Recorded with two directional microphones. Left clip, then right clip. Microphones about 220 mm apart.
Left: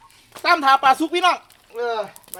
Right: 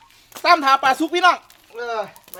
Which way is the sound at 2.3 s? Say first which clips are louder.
Even; 25° right (ahead or behind).